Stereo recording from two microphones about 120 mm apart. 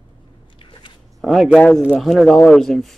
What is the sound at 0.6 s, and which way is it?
Biting, 40° left (ahead or behind).